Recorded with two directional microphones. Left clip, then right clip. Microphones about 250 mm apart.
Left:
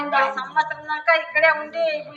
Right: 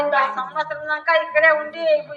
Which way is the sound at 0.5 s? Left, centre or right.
Left.